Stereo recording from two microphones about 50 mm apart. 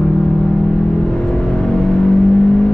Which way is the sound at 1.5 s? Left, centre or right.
Centre.